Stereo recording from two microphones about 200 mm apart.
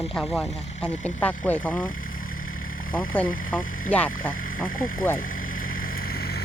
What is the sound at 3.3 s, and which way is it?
Speech, 45° left (ahead or behind).